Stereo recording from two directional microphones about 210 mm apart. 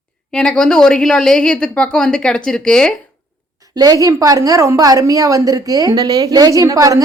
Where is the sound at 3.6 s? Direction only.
20° right (ahead or behind).